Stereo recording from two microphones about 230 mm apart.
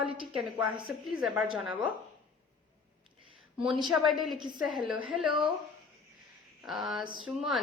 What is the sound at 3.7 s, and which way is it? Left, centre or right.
Speech, centre.